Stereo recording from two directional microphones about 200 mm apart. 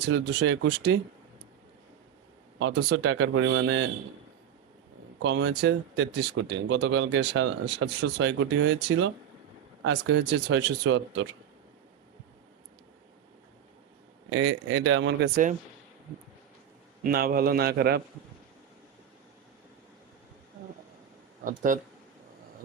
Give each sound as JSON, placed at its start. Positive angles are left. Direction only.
{"t": 0.0, "sound": "speech", "side_deg": -60}
{"t": 2.6, "sound": "speech", "side_deg": -65}
{"t": 5.2, "sound": "speech", "side_deg": -65}
{"t": 14.3, "sound": "speech", "side_deg": -80}
{"t": 15.2, "sound": "speech", "side_deg": -40}
{"t": 17.0, "sound": "a man's voice", "side_deg": -45}
{"t": 21.4, "sound": "speech", "side_deg": -40}